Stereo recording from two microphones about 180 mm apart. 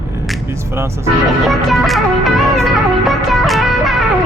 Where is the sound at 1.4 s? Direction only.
Centre (ahead or behind).